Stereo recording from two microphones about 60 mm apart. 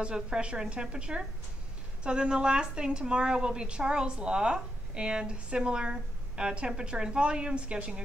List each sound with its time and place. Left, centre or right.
0.0 s a woman's voice: centre